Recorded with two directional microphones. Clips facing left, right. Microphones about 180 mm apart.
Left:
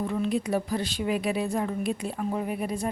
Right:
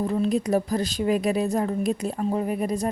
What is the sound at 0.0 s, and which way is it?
Speech, 35° right (ahead or behind).